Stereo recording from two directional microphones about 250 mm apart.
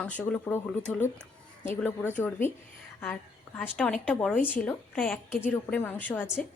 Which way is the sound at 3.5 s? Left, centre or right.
Centre.